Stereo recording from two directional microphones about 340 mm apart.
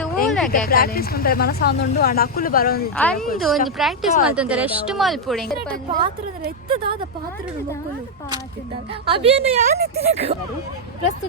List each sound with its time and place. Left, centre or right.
0.3 s a sound: centre
0.5 s speech: left
2.9 s a woman's voice: centre
5.7 s a woman's voice: right
9.0 s a woman's voice: centre
9.6 s a woman's voice: right